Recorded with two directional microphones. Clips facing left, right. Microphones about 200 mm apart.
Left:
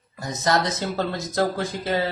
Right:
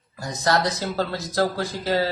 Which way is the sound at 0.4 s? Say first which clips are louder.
Even; 20° left (ahead or behind).